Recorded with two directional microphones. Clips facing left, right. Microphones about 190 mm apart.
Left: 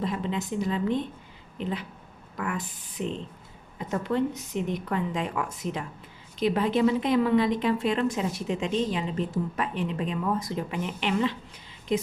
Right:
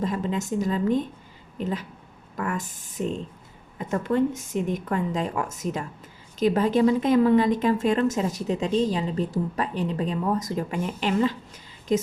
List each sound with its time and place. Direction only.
0.0 s a woman's voice: 45° right (ahead or behind)